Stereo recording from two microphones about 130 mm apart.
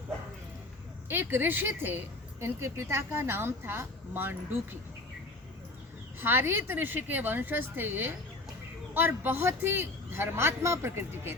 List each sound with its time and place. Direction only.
1.0 s a woman's voice: 15° right (ahead or behind)
6.1 s a woman's voice: 15° right (ahead or behind)